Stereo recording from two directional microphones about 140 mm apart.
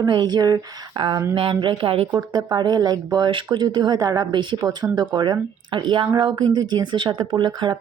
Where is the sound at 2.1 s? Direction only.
30° right (ahead or behind).